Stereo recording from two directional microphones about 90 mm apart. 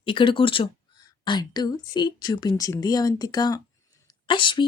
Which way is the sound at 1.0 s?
55° left (ahead or behind).